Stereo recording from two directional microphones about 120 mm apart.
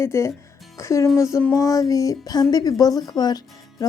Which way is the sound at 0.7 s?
25° left (ahead or behind).